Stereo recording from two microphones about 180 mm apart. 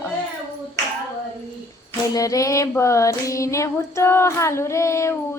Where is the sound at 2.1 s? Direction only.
20° left (ahead or behind).